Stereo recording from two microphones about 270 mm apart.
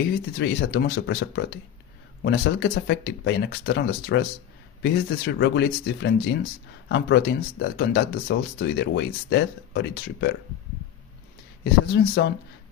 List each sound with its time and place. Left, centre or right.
0.4 s speech: left
11.6 s speech: left